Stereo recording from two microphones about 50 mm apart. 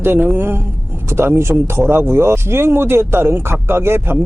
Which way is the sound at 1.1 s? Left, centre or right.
Right.